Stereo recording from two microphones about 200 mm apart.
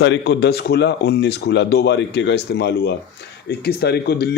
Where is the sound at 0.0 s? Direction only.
60° left (ahead or behind).